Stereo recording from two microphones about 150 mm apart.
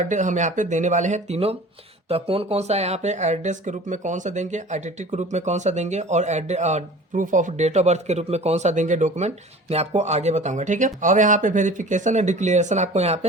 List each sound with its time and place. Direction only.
0.0 s speech: 55° right (ahead or behind)